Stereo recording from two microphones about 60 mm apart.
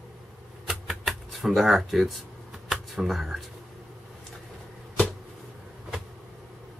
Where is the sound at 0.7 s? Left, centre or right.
Centre.